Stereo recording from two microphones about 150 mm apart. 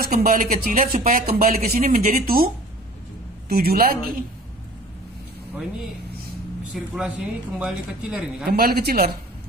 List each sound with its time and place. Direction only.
0.1 s speech: 65° right (ahead or behind)
3.4 s speech: 90° right
6.7 s speech: 5° right (ahead or behind)
8.5 s speech: 90° right